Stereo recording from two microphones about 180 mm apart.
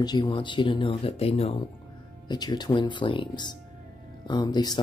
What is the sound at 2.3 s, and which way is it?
Speech, 25° left (ahead or behind).